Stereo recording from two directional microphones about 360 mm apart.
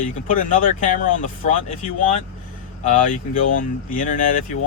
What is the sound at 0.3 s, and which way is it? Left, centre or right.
Speech, left.